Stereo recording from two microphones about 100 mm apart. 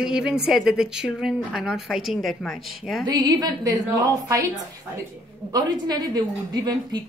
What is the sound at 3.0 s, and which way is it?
A woman's voice, 40° right (ahead or behind).